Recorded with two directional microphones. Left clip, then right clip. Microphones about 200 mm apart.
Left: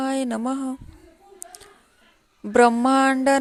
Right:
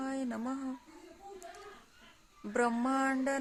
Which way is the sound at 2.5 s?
40° left (ahead or behind).